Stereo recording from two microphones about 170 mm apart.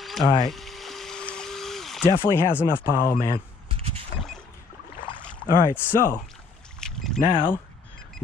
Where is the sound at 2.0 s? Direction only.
25° left (ahead or behind).